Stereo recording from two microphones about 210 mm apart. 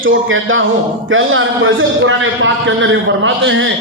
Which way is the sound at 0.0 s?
65° right (ahead or behind).